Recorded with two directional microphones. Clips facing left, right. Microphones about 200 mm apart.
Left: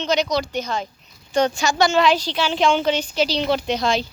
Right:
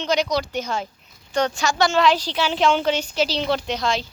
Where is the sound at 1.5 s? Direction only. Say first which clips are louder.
Left 2 dB; centre (ahead or behind).